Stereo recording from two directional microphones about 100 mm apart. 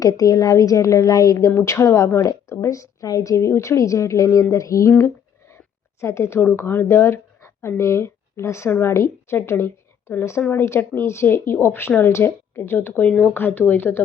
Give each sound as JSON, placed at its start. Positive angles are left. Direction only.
{"t": 0.0, "sound": "a woman's voice", "side_deg": 35}